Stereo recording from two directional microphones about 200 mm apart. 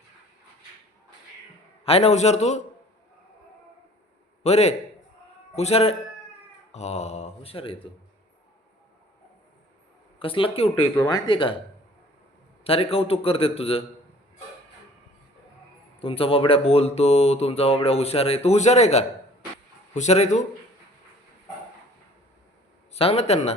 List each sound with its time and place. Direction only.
1.8 s speech: 30° left (ahead or behind)
4.4 s speech: 35° left (ahead or behind)
10.2 s a man's voice: 25° left (ahead or behind)
10.9 s speech: 15° left (ahead or behind)
11.3 s a man's voice: 25° left (ahead or behind)
12.6 s a man's voice: 30° left (ahead or behind)
16.0 s speech: 30° left (ahead or behind)
22.9 s speech: 30° left (ahead or behind)